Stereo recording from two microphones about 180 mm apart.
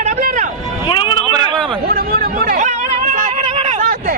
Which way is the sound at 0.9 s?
25° left (ahead or behind).